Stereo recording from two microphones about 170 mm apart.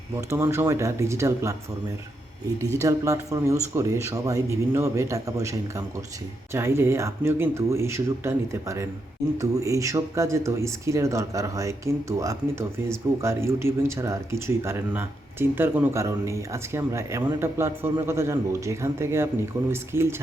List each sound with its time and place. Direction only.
0.3 s speech: 15° right (ahead or behind)
2.8 s speech: 20° right (ahead or behind)